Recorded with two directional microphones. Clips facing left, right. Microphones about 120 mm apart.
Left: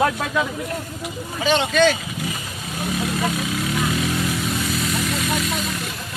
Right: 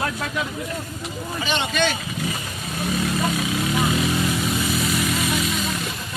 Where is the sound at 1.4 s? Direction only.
90° left.